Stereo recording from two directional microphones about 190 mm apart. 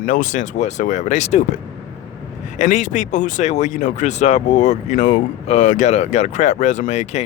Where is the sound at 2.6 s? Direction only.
40° left (ahead or behind).